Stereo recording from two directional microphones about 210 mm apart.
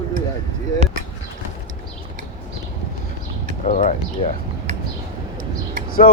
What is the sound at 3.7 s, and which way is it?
Speech, 35° left (ahead or behind).